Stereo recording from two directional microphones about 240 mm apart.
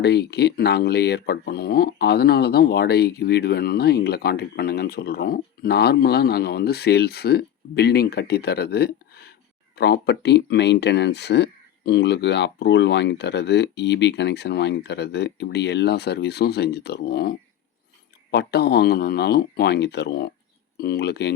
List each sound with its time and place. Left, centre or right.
0.0 s speech: left